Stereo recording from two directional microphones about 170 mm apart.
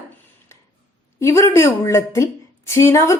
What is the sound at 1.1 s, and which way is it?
A woman's voice, 15° left (ahead or behind).